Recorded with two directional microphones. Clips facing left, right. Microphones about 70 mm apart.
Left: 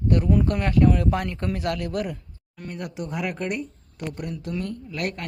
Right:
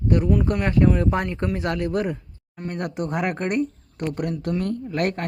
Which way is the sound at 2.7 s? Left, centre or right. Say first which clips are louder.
Right 5 dB; right.